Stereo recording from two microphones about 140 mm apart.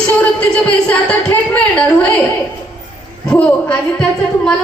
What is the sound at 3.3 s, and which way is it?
Speech, 10° left (ahead or behind).